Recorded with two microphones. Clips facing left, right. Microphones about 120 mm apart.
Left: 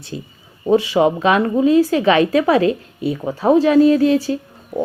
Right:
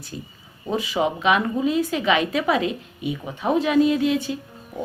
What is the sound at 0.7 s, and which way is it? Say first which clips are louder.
Speech: left 9 dB; 30° left (ahead or behind).